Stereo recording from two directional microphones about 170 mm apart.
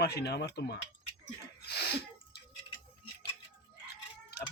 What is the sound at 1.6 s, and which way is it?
Sneeze, 70° left (ahead or behind).